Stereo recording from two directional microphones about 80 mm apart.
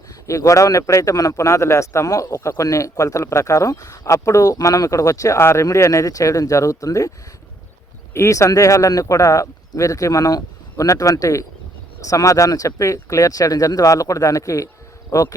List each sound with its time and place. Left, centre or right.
0.3 s speech: left
5.4 s speech: left
5.6 s speech: left
8.1 s speech: left